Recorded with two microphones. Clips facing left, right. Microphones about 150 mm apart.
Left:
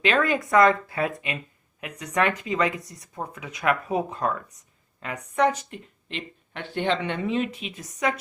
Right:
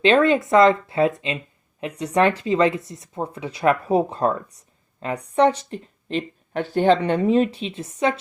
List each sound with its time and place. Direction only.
0.0 s speech: 30° right (ahead or behind)